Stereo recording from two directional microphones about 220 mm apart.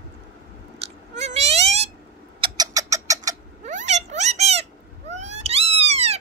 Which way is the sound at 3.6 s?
30° right (ahead or behind).